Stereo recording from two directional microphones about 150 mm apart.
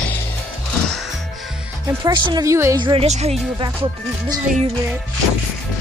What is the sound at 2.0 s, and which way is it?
Speech, 30° right (ahead or behind).